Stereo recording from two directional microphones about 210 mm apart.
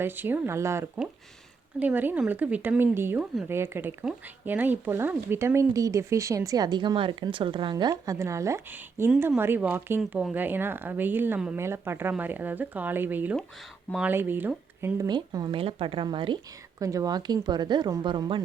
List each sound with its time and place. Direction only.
0.0 s speech: 10° right (ahead or behind)